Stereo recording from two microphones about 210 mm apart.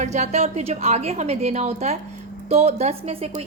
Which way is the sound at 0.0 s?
30° right (ahead or behind).